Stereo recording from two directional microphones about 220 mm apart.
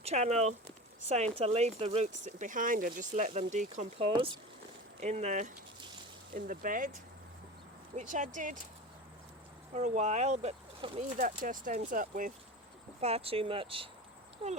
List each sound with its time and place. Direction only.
0.0 s speech: 30° right (ahead or behind)
7.9 s speech: 35° right (ahead or behind)
9.7 s speech: 30° right (ahead or behind)
11.2 s speech: 35° right (ahead or behind)